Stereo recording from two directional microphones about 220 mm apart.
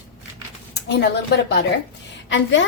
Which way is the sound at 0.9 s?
50° left (ahead or behind).